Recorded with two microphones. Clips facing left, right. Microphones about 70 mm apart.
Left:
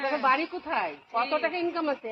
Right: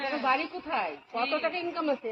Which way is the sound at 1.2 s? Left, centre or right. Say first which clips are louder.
Left 1 dB; left.